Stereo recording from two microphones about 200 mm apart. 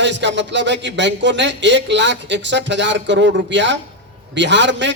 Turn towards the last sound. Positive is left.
turn(degrees=-65)  # may be behind; listen again after turning